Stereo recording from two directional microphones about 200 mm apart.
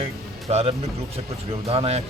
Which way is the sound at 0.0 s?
30° right (ahead or behind).